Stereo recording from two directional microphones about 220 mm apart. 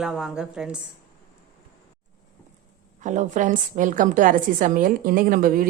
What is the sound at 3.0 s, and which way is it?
A woman's voice, 35° right (ahead or behind).